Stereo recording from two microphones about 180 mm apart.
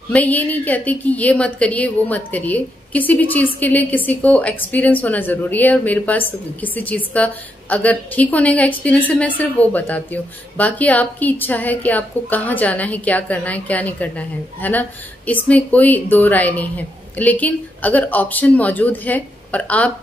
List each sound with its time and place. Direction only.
0.1 s speech: 10° left (ahead or behind)